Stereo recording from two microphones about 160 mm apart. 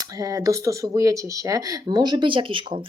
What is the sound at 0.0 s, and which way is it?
Speech, 20° right (ahead or behind).